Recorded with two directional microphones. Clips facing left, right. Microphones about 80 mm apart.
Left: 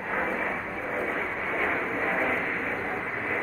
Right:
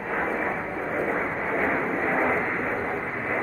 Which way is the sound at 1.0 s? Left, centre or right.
Right.